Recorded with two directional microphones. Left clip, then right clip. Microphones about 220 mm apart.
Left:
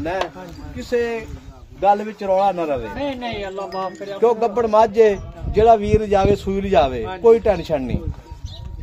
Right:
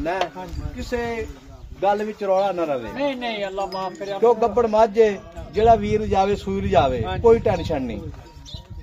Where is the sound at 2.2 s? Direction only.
40° left (ahead or behind).